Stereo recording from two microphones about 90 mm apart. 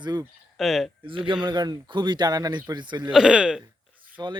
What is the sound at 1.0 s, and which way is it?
Speech, 75° right (ahead or behind).